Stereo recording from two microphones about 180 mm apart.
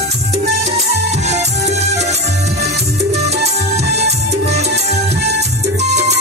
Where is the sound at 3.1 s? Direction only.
35° right (ahead or behind).